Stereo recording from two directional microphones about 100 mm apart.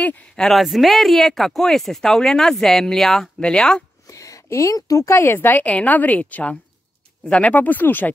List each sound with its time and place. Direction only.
0.0 s speech: 5° left (ahead or behind)
4.1 s a woman's voice: 35° left (ahead or behind)